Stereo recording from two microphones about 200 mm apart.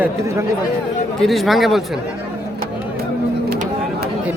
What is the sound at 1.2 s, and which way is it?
Speech, centre (ahead or behind).